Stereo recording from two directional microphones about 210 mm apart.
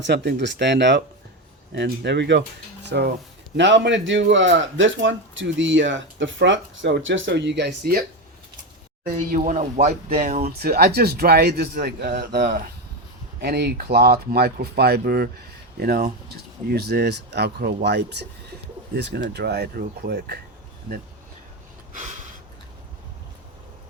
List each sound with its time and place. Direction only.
0.0 s speech: 55° right (ahead or behind)
9.0 s speech: 40° right (ahead or behind)